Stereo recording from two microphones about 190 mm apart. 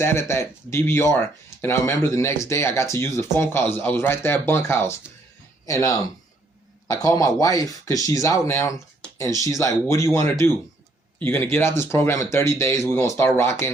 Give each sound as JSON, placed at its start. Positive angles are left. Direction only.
{"t": 0.0, "sound": "speech", "side_deg": 15}